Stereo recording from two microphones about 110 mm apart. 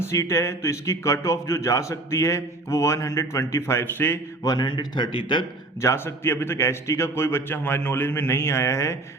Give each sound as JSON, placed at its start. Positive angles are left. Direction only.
{"t": 0.0, "sound": "a man's voice", "side_deg": 25}
{"t": 4.4, "sound": "a man's voice", "side_deg": 40}
{"t": 5.8, "sound": "a man's voice", "side_deg": 25}